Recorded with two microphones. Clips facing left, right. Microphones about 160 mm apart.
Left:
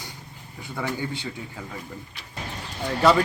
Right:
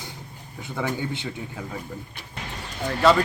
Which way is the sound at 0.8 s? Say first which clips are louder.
Right 1 dB; 20° right (ahead or behind).